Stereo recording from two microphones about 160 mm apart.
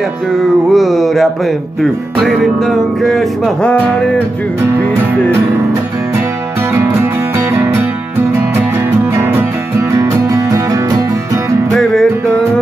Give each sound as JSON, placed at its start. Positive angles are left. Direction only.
{"t": 0.7, "sound": "mantra", "side_deg": 0}
{"t": 1.8, "sound": "music", "side_deg": 0}
{"t": 6.7, "sound": "music", "side_deg": -15}
{"t": 9.1, "sound": "music", "side_deg": -15}
{"t": 11.7, "sound": "music", "side_deg": 5}